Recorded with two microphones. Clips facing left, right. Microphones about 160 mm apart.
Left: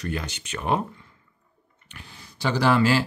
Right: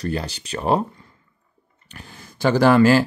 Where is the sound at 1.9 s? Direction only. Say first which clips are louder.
Right 4 dB; 50° right (ahead or behind).